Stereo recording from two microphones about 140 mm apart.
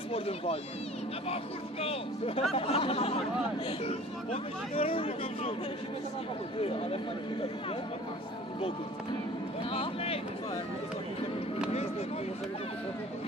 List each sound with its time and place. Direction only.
0.1 s speech: 45° left (ahead or behind)
6.6 s speech: 45° left (ahead or behind)
9.7 s speech: 40° left (ahead or behind)